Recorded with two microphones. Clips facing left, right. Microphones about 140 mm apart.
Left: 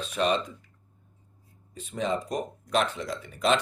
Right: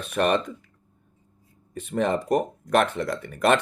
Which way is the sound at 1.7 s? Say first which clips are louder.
Right 5 dB; 60° right (ahead or behind).